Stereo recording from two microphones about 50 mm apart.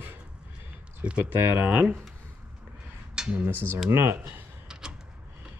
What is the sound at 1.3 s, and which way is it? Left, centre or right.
Speech, right.